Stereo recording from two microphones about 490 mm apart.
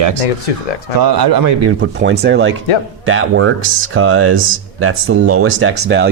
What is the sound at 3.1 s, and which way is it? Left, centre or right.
Speech, right.